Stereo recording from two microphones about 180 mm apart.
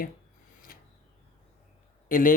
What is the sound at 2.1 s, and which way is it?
Speech, 50° left (ahead or behind).